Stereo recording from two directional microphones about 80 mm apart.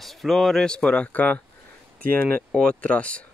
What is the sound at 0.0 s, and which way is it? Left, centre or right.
Speech, centre.